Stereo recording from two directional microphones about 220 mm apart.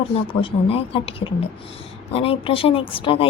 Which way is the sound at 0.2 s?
25° left (ahead or behind).